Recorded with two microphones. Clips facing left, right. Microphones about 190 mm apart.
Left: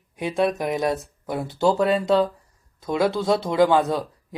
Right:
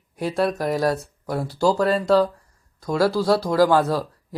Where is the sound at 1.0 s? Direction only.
Centre (ahead or behind).